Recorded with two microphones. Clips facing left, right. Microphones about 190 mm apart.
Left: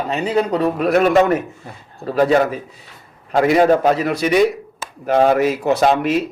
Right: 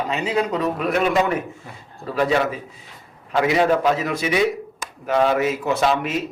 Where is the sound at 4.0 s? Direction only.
65° left (ahead or behind).